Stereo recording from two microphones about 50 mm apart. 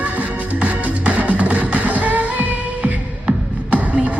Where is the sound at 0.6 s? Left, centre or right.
Right.